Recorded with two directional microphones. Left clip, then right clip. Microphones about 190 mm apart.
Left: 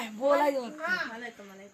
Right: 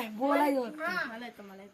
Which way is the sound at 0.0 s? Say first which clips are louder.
Left 3 dB; 55° right (ahead or behind).